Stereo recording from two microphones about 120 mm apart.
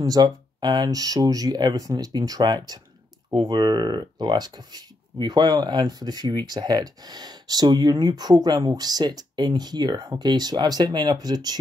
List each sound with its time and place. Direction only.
0.0 s speech: 35° right (ahead or behind)